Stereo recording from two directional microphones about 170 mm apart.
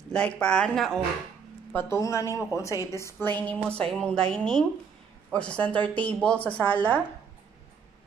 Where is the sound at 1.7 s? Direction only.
15° left (ahead or behind).